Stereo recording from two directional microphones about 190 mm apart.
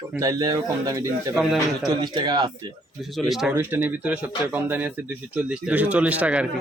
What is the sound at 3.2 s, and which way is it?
Speech, centre (ahead or behind).